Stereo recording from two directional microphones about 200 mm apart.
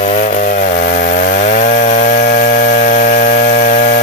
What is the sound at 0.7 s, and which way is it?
Chainsaw, 45° left (ahead or behind).